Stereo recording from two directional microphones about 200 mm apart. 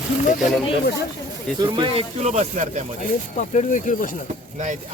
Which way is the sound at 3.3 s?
40° left (ahead or behind).